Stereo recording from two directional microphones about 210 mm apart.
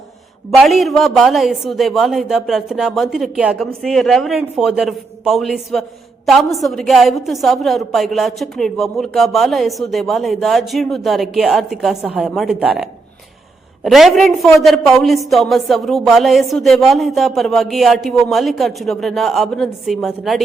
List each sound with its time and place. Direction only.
0.6 s a woman's voice: centre (ahead or behind)